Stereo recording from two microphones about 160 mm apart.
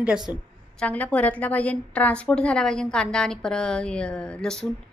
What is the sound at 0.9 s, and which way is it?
A woman's voice, 10° left (ahead or behind).